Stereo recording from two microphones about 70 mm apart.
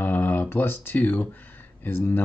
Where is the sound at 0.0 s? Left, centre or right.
Left.